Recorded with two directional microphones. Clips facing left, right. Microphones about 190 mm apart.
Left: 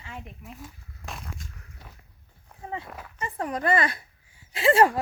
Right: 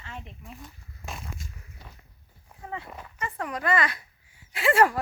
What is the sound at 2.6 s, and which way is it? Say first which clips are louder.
Dog: left 2 dB; 25° left (ahead or behind).